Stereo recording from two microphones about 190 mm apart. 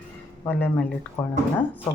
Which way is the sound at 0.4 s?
10° left (ahead or behind).